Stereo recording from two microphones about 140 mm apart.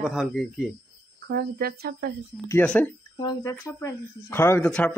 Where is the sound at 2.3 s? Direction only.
20° right (ahead or behind).